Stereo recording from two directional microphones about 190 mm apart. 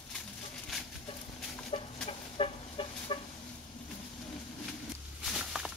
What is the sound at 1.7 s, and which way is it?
Chicken, 30° left (ahead or behind).